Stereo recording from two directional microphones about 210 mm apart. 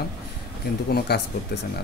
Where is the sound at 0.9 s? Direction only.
50° left (ahead or behind).